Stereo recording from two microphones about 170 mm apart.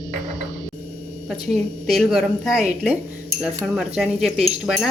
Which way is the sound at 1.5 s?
Centre (ahead or behind).